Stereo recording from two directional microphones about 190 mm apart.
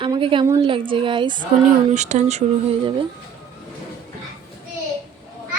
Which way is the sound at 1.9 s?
40° right (ahead or behind).